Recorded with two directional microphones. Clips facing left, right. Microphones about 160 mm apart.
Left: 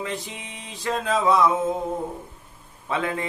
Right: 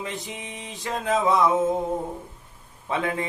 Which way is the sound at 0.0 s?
20° right (ahead or behind).